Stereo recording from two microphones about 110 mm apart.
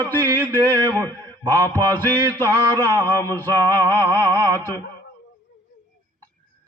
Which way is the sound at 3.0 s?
20° left (ahead or behind).